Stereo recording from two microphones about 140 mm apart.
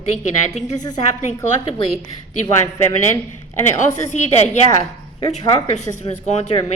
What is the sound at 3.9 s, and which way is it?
Speech, 55° left (ahead or behind).